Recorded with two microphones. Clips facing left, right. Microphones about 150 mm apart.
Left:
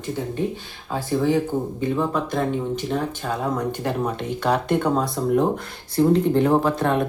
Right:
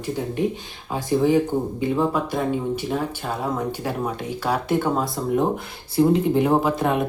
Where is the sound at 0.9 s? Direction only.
15° right (ahead or behind).